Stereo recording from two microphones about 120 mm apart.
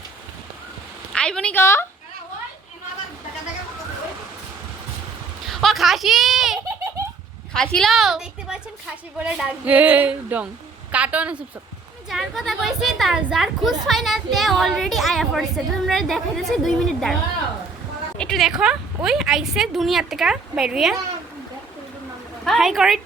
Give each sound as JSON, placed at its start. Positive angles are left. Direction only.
{"t": 1.1, "sound": "a sound", "side_deg": 5}
{"t": 1.5, "sound": "a woman's voice", "side_deg": 20}
{"t": 5.5, "sound": "a sound", "side_deg": 0}
{"t": 7.5, "sound": "a woman's voice", "side_deg": 5}
{"t": 18.2, "sound": "a woman's voice", "side_deg": 5}
{"t": 22.4, "sound": "a woman's voice", "side_deg": 0}